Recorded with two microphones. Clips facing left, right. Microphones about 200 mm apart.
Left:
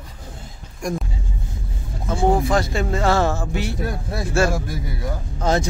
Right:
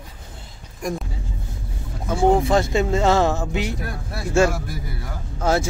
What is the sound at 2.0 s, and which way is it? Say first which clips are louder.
Vehicle: right 2 dB; 5° right (ahead or behind).